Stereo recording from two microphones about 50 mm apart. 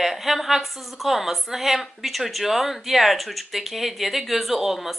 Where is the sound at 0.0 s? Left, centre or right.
Centre.